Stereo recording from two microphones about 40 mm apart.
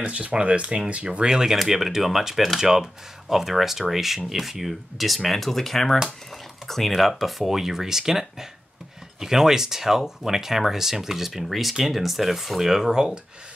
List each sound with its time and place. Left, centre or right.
0.0 s speech: right
1.3 s speech: centre
7.0 s speech: centre